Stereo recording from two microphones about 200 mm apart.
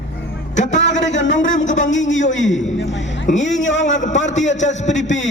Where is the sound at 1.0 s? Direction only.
65° left (ahead or behind).